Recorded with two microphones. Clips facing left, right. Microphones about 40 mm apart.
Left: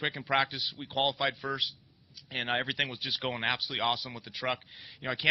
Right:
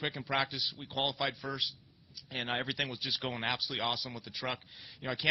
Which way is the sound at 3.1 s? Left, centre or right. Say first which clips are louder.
Left 3 dB; centre.